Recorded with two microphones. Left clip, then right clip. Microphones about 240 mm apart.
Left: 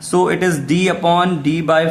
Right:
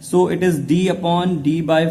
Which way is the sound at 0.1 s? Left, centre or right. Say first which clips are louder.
Left 1 dB; centre.